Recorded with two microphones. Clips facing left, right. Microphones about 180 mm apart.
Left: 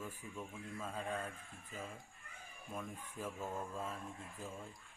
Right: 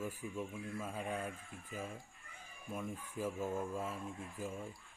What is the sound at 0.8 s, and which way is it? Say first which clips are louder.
Speech: even; 10° right (ahead or behind).